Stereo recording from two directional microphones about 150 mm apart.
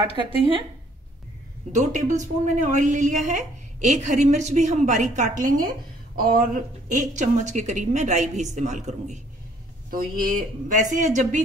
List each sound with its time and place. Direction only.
1.7 s a woman's voice: 55° right (ahead or behind)
9.8 s a woman's voice: 70° right (ahead or behind); by 11.4 s 55° right (ahead or behind)